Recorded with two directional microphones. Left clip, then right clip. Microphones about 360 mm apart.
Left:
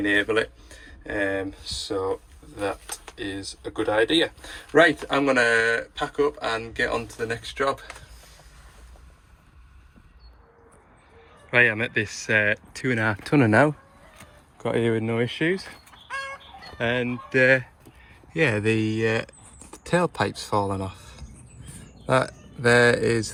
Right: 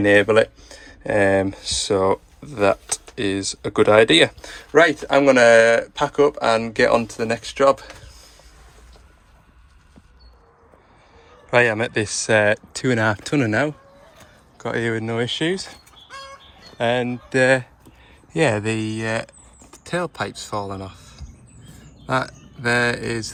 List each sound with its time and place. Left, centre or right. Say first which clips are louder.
0.0 s speech: right 8 dB; centre
1.9 s speech: right 8 dB; right
3.1 s speech: right 9 dB; centre
4.4 s speech: right 3 dB; centre
11.5 s speech: right 3 dB; centre